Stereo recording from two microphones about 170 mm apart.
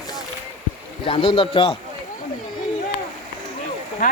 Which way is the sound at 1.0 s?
30° left (ahead or behind).